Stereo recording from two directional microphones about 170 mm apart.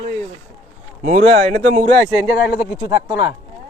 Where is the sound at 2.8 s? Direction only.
20° right (ahead or behind).